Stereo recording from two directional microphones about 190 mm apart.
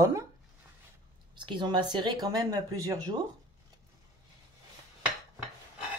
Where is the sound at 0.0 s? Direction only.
15° right (ahead or behind).